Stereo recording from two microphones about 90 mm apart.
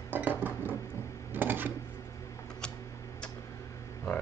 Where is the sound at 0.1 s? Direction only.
20° right (ahead or behind).